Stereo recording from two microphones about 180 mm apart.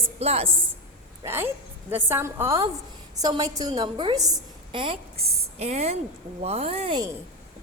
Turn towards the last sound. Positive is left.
turn(degrees=-35)  # may be behind; listen again after turning